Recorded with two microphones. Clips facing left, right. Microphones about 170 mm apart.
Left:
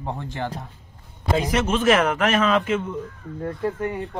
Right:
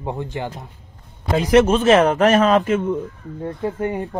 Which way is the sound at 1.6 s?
35° right (ahead or behind).